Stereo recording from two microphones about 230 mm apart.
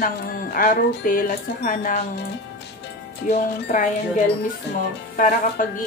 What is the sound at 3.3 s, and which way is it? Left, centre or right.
Speech, left.